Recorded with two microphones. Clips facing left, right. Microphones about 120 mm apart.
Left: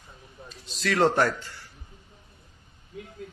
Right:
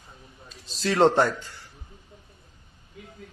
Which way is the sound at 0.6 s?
35° right (ahead or behind).